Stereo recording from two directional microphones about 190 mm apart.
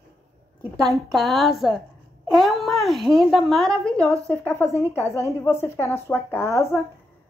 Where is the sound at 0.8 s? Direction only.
Centre (ahead or behind).